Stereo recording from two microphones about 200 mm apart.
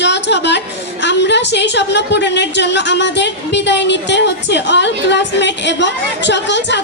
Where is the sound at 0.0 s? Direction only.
60° left (ahead or behind).